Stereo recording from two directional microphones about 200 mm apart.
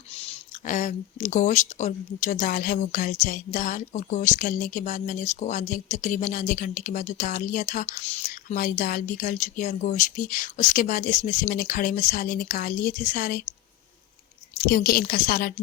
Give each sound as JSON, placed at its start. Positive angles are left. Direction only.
{"t": 0.1, "sound": "speech", "side_deg": 30}
{"t": 14.7, "sound": "a woman's voice", "side_deg": 45}